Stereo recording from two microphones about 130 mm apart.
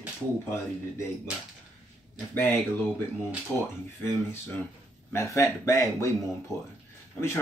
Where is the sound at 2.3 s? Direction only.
15° left (ahead or behind).